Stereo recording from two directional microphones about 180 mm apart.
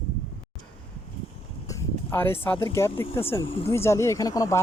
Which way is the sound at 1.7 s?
10° left (ahead or behind).